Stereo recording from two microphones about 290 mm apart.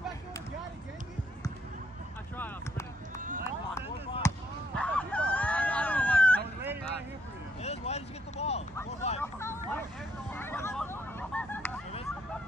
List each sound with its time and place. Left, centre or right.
4.2 s basketball bounce: centre
4.7 s a sound: centre
7.6 s vehicle: left
9.2 s vehicle: centre
10.3 s music: centre